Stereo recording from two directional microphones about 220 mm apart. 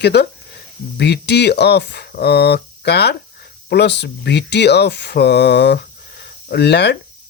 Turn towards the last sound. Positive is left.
turn(degrees=50)  # may be behind; listen again after turning